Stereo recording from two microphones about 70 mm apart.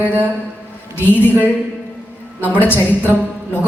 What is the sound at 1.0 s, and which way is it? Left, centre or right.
Speech, left.